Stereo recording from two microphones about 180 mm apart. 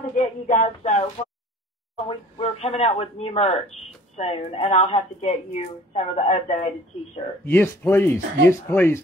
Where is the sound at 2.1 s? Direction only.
30° left (ahead or behind).